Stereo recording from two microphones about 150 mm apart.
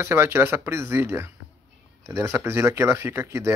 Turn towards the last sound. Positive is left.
turn(degrees=-20)  # may be behind; listen again after turning